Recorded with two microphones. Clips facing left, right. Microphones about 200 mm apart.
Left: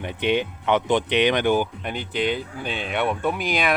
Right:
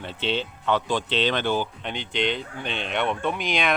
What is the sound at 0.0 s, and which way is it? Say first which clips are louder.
Speech: left 5 dB; 15° left (ahead or behind).